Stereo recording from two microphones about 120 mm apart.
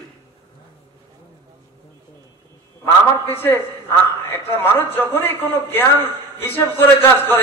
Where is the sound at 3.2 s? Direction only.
20° left (ahead or behind).